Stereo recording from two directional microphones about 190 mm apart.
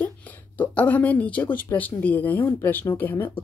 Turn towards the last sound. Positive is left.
turn(degrees=10)  # may be behind; listen again after turning